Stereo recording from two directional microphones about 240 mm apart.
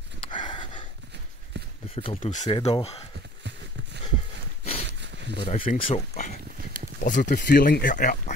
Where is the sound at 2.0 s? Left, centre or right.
Left.